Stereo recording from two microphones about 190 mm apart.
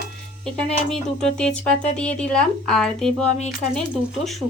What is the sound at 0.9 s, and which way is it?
A woman's voice, 5° left (ahead or behind).